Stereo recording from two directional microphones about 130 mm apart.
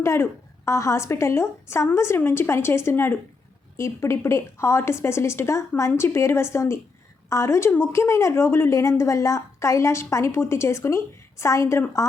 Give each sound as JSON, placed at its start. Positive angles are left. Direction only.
{"t": 0.0, "sound": "a woman's voice", "side_deg": 20}